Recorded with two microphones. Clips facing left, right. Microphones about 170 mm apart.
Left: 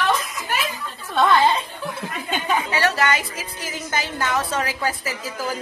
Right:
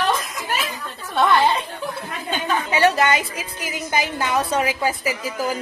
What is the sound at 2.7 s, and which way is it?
A woman's voice, 20° right (ahead or behind).